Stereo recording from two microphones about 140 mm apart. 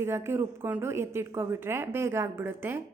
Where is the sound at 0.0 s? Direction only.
20° right (ahead or behind).